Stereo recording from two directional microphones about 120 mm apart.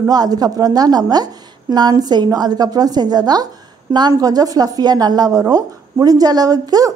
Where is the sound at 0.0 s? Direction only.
35° right (ahead or behind).